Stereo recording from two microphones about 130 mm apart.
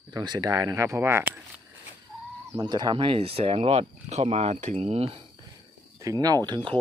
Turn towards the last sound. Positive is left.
turn(degrees=-35)  # may be behind; listen again after turning